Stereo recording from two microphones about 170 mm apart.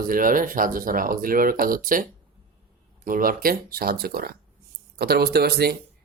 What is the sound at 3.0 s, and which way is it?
Speech, 55° right (ahead or behind).